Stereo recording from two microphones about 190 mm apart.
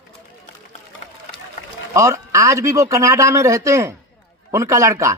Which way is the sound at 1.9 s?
15° right (ahead or behind).